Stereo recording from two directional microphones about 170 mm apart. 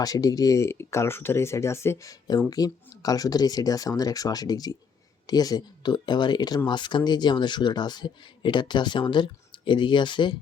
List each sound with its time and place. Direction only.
0.0 s speech: 20° left (ahead or behind)